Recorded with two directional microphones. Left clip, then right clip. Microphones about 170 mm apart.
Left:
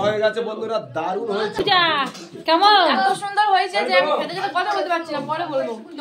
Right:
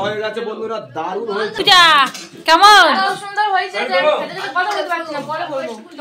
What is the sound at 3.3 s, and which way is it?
Speech, 35° left (ahead or behind).